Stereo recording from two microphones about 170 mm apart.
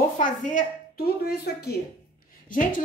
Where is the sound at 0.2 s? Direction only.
50° left (ahead or behind); by 1.8 s 70° left (ahead or behind).